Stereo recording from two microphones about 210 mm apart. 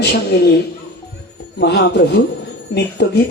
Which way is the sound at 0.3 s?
50° left (ahead or behind).